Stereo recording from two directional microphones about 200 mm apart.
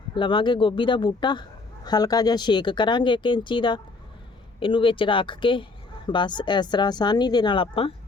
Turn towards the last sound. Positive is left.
turn(degrees=25)  # may be behind; listen again after turning